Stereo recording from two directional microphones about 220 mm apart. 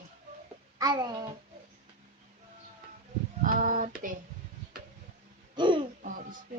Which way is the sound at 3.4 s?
35° right (ahead or behind).